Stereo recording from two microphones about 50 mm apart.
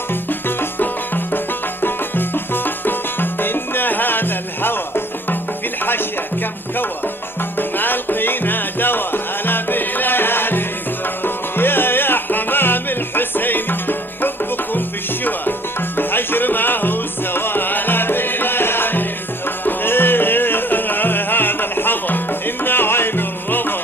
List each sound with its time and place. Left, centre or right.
0.1 s music: left
7.5 s music: left
16.0 s music: left